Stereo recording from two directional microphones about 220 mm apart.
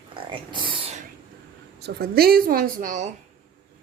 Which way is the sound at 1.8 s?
45° right (ahead or behind).